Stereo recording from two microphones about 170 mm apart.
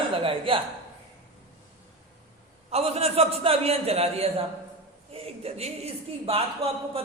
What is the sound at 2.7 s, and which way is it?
A man's voice, 35° right (ahead or behind).